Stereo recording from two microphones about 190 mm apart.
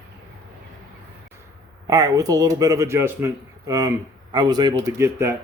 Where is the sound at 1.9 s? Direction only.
20° right (ahead or behind).